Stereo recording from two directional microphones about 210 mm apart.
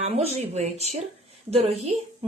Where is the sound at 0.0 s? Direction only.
30° right (ahead or behind).